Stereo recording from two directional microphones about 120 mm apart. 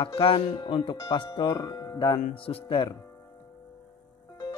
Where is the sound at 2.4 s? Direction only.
55° left (ahead or behind).